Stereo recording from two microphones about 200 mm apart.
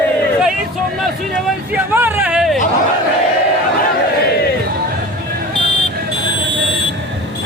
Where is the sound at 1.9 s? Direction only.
10° right (ahead or behind).